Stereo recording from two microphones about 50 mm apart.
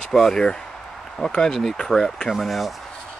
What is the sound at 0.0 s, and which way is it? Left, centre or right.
Speech, centre.